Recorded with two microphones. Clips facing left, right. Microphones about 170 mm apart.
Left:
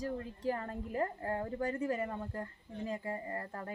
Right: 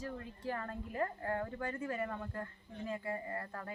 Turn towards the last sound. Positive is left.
turn(degrees=35)  # may be behind; listen again after turning